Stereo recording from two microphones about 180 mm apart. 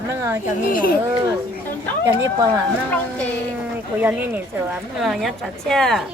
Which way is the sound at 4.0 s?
10° right (ahead or behind).